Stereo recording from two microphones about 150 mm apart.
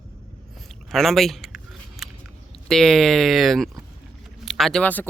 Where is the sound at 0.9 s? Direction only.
Centre (ahead or behind).